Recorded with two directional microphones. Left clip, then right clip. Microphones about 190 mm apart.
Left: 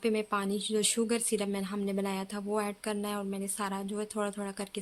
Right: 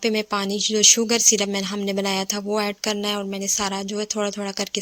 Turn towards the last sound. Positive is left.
turn(degrees=-35)  # may be behind; listen again after turning